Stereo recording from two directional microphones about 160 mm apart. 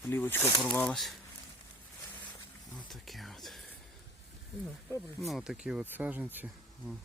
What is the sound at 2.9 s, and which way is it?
Speech, centre (ahead or behind).